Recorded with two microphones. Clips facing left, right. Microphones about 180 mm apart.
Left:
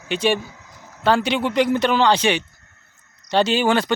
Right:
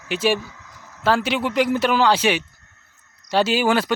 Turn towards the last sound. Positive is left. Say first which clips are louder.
# left 1 dB
turn(degrees=-5)  # may be behind; listen again after turning